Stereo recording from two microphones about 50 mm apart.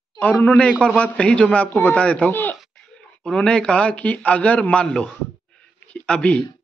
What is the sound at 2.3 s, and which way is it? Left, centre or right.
Speech, left.